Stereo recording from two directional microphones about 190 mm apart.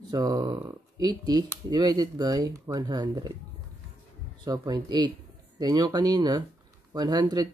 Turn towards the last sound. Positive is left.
turn(degrees=-20)  # may be behind; listen again after turning